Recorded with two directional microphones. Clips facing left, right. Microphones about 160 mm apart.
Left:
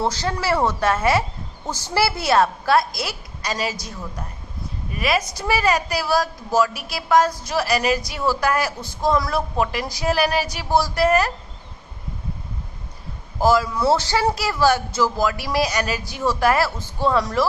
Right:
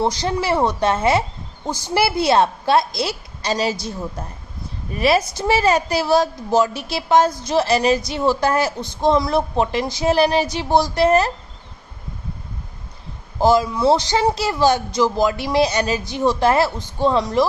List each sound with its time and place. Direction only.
0.0 s a woman's voice: 15° right (ahead or behind)
13.4 s a woman's voice: 20° right (ahead or behind)